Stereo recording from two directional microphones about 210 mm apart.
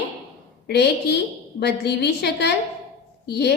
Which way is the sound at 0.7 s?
55° left (ahead or behind).